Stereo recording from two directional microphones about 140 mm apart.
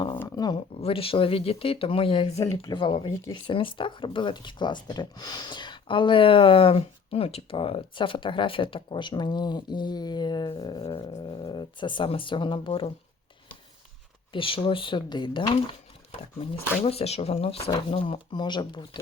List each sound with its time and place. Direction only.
0.2 s a sound: 25° left (ahead or behind)
0.8 s speech: 40° left (ahead or behind)
14.3 s speech: 40° left (ahead or behind)
16.8 s speech: 45° left (ahead or behind)